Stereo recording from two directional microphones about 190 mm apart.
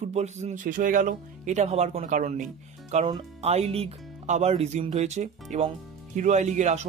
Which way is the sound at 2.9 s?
30° right (ahead or behind).